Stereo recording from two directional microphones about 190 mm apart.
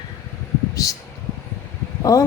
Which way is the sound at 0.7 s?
15° left (ahead or behind).